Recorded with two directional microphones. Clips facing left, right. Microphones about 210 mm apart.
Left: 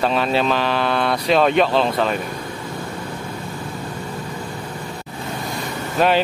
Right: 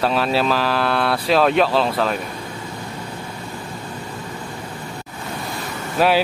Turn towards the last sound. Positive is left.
turn(degrees=-5)  # may be behind; listen again after turning